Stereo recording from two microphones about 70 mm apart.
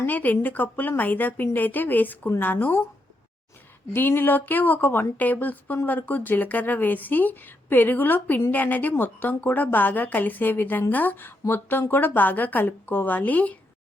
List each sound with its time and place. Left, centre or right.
0.0 s speech: left
3.9 s speech: left